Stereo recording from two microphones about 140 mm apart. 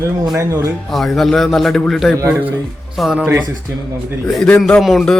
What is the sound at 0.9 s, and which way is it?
Speech, centre (ahead or behind).